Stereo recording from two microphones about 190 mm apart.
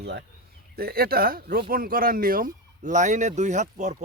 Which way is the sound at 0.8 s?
55° right (ahead or behind).